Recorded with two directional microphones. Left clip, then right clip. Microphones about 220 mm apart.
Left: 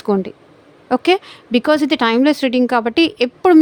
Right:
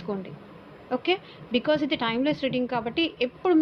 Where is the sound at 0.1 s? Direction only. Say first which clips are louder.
Left 15 dB; 60° left (ahead or behind).